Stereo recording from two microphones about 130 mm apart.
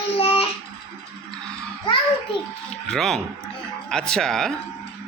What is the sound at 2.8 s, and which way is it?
Speech, 5° left (ahead or behind).